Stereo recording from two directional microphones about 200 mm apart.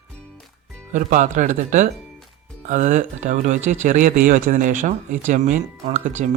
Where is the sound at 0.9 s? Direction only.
40° right (ahead or behind).